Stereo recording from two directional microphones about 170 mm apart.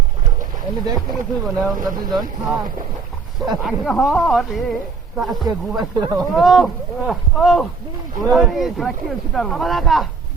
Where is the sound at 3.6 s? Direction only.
Centre (ahead or behind).